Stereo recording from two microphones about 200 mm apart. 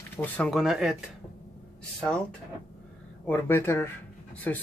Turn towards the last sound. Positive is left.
turn(degrees=10)  # may be behind; listen again after turning